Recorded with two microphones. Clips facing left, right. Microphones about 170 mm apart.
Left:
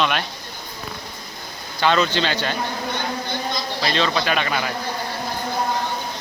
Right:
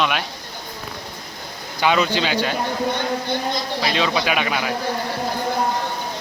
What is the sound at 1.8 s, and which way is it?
Speech, 10° right (ahead or behind).